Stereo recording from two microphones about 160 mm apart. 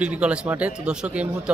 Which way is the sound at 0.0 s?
10° right (ahead or behind).